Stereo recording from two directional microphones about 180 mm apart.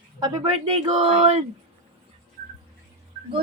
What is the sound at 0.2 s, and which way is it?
Speech, 20° right (ahead or behind).